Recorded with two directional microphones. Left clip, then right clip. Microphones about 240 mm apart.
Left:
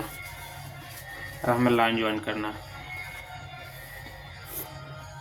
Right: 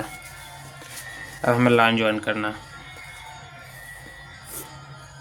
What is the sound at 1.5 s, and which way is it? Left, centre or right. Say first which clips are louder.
Speech: right 5 dB; right.